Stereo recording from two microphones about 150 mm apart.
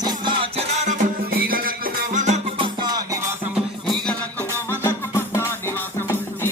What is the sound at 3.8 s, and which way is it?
Music, 5° left (ahead or behind).